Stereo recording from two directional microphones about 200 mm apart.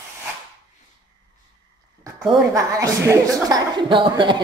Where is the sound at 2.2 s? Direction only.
Centre (ahead or behind).